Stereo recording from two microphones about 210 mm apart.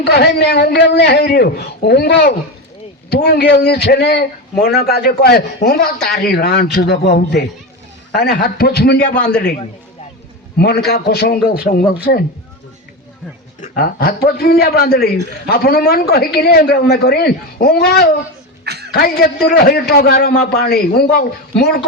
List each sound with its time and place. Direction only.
0.0 s a man's voice: 50° left (ahead or behind)
9.1 s a man's voice: 5° left (ahead or behind)
10.8 s a man's voice: 50° left (ahead or behind)
13.6 s a man's voice: 45° left (ahead or behind)
18.6 s a sound: 50° right (ahead or behind)
18.9 s a man's voice: 50° left (ahead or behind)